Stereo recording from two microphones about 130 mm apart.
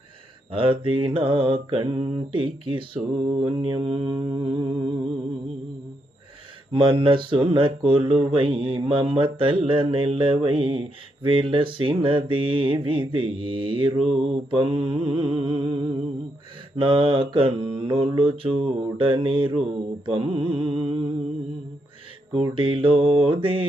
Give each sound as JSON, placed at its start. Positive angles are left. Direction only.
{"t": 0.5, "sound": "mantra", "side_deg": -45}
{"t": 6.7, "sound": "mantra", "side_deg": -45}
{"t": 22.5, "sound": "mantra", "side_deg": -40}